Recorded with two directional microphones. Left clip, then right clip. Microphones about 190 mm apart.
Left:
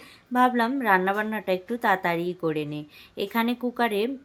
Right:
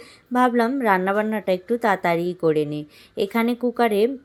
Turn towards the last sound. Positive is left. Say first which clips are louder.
# right 6 dB
turn(degrees=-15)  # may be behind; listen again after turning